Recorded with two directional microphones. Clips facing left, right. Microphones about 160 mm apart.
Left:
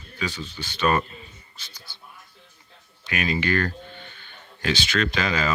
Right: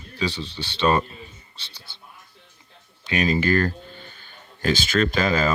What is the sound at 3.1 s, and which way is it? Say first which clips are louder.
Speech: right 4 dB; 35° right (ahead or behind).